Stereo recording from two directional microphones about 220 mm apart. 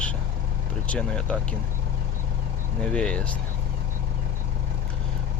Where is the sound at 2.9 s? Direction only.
5° left (ahead or behind).